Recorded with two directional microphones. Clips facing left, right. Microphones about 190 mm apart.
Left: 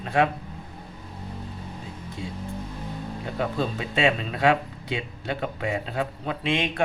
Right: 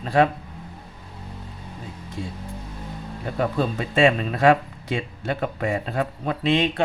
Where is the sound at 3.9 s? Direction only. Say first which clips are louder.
Right 6 dB; 45° right (ahead or behind).